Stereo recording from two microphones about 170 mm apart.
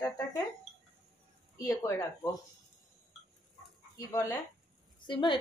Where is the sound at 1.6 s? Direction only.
20° left (ahead or behind).